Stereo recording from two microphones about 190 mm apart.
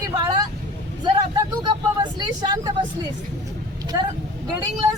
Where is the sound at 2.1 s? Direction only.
20° right (ahead or behind).